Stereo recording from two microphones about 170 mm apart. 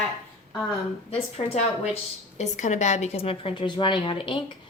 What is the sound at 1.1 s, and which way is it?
A woman's voice, 35° left (ahead or behind).